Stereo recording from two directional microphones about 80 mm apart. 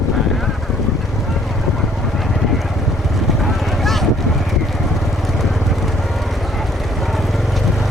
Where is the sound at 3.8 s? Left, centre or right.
Centre.